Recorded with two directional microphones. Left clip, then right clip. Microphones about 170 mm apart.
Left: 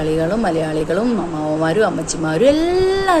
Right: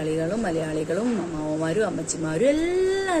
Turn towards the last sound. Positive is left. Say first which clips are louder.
# left 8 dB
turn(degrees=-15)  # may be behind; listen again after turning